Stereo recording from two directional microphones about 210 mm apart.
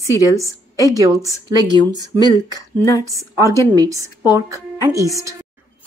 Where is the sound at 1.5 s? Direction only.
20° left (ahead or behind).